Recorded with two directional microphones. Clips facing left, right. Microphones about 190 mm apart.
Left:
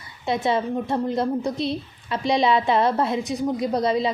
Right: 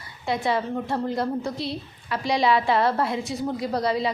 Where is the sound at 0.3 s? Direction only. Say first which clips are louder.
Left 2 dB; 20° left (ahead or behind).